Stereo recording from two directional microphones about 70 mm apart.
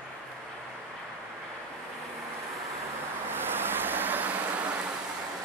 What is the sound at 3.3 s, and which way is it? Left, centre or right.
Vehicle, right.